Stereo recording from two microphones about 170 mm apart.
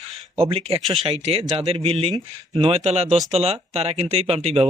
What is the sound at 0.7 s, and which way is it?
Speech, 35° right (ahead or behind).